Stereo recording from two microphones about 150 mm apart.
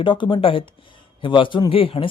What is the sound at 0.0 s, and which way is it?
A man's voice, 35° left (ahead or behind).